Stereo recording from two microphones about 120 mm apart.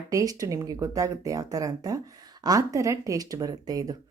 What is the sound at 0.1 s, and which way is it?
Speech, 30° right (ahead or behind).